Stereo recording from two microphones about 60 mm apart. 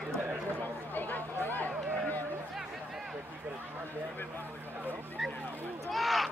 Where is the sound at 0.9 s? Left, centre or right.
Left.